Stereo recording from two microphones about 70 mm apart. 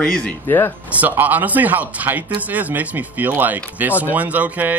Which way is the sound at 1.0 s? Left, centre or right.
Right.